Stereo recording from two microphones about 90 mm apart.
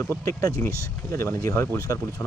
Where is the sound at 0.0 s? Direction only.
25° left (ahead or behind).